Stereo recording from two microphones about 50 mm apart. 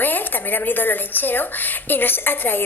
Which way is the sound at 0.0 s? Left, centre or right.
Left.